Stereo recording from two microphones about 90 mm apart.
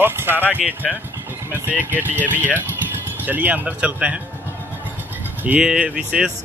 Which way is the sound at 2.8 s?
20° right (ahead or behind).